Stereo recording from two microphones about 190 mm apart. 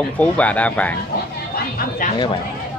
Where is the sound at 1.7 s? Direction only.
45° left (ahead or behind).